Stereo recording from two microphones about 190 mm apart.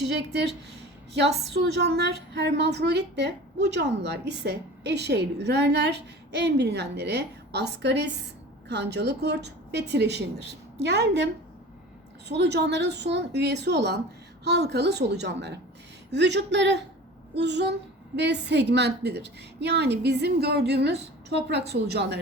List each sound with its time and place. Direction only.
0.3 s a woman's voice: 60° right (ahead or behind)
12.3 s a woman's voice: 65° right (ahead or behind)